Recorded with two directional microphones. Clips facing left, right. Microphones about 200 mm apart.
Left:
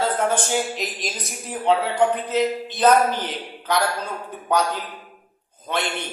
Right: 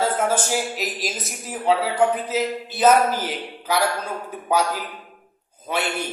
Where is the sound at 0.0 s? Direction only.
5° right (ahead or behind).